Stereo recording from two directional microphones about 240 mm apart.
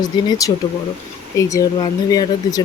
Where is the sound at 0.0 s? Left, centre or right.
Centre.